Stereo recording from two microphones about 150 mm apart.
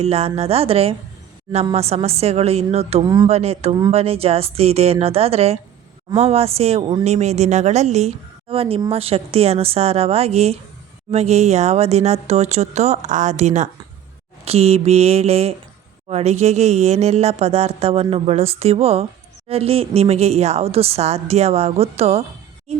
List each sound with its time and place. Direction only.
0.0 s speech: 45° right (ahead or behind)